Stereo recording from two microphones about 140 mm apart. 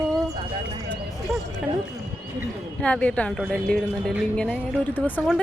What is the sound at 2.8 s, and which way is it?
A woman's voice, 10° left (ahead or behind).